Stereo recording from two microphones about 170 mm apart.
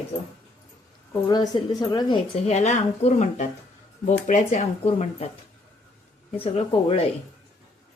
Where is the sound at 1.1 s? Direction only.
25° left (ahead or behind).